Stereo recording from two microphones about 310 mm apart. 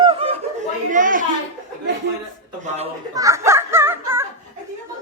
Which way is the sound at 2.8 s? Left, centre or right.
Centre.